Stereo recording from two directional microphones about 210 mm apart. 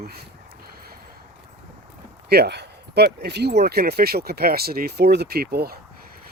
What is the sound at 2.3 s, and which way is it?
Speech, 50° right (ahead or behind).